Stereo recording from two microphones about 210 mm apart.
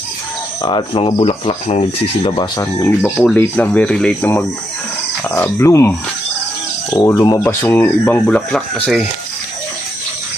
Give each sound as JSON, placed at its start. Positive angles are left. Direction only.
{"t": 0.6, "sound": "speech", "side_deg": 25}